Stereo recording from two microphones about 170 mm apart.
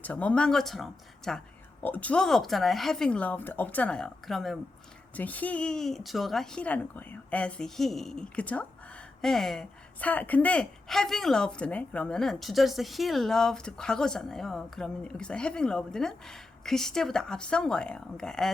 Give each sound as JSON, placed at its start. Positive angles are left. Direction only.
{"t": 0.0, "sound": "speech", "side_deg": 10}